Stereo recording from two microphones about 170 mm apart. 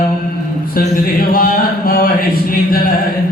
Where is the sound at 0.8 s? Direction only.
60° left (ahead or behind).